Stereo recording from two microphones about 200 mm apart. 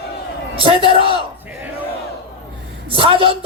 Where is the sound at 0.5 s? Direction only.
25° right (ahead or behind).